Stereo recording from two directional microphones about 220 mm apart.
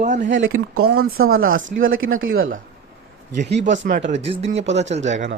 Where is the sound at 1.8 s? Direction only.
65° right (ahead or behind).